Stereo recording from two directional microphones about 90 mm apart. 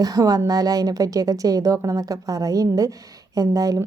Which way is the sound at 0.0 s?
45° right (ahead or behind).